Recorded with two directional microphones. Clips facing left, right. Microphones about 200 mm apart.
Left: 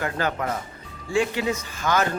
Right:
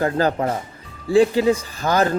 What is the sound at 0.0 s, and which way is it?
A man's voice, 35° right (ahead or behind).